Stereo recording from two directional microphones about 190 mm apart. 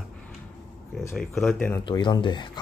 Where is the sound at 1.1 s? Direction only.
Centre (ahead or behind).